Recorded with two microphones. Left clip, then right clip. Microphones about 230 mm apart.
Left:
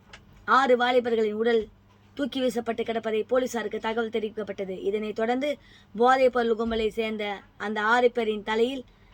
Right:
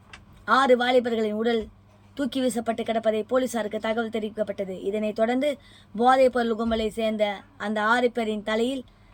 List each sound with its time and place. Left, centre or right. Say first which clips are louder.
0.4 s speech: right 1 dB; centre